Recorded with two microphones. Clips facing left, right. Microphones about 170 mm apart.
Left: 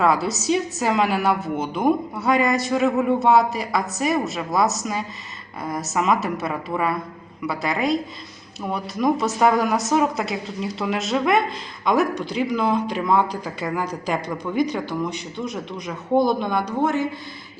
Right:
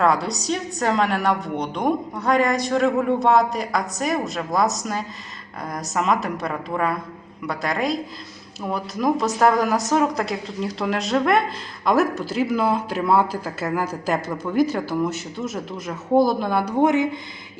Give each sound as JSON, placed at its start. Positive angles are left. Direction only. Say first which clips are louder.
{"t": 0.0, "sound": "a woman's voice", "louder": "even", "side_deg": 0}
{"t": 16.7, "sound": "speech", "louder": "right 5 dB", "side_deg": -15}